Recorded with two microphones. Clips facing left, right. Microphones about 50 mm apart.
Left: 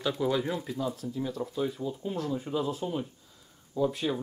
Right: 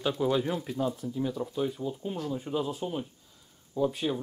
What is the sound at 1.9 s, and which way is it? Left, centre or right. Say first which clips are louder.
Speech: left 1 dB; centre.